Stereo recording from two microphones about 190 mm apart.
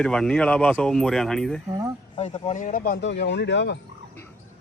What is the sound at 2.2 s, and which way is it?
Speech, 30° left (ahead or behind).